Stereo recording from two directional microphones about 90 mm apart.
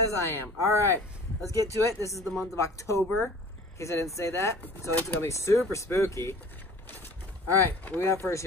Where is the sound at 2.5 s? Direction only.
35° left (ahead or behind).